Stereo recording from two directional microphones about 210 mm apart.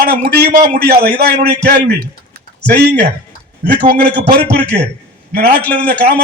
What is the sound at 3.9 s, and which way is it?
A man's voice, 50° right (ahead or behind).